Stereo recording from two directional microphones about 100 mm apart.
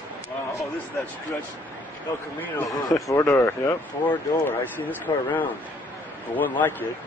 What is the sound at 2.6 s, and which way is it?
A man's voice, 35° left (ahead or behind).